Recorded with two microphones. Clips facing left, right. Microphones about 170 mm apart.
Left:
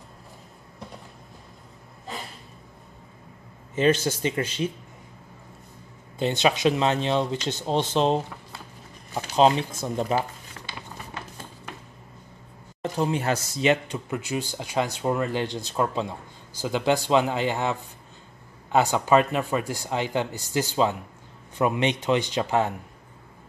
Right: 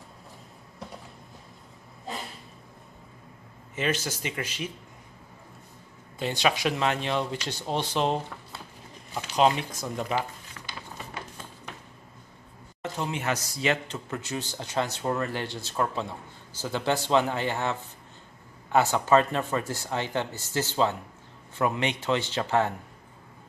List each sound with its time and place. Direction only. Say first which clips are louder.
3.7 s speech: left 8 dB; 30° left (ahead or behind)
6.1 s speech: left 4 dB; 25° left (ahead or behind)
13.0 s speech: left 5 dB; 35° left (ahead or behind); by 22.7 s 15° left (ahead or behind)